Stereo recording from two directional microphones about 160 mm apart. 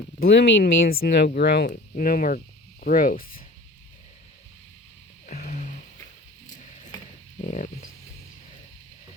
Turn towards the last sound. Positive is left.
turn(degrees=50)  # may be behind; listen again after turning